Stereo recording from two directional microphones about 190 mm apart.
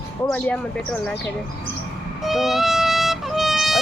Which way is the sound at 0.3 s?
5° left (ahead or behind).